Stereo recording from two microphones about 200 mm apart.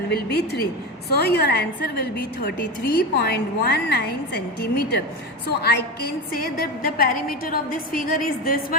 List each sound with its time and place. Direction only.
0.1 s a woman's voice: 55° left (ahead or behind)
6.3 s a woman's voice: 45° left (ahead or behind)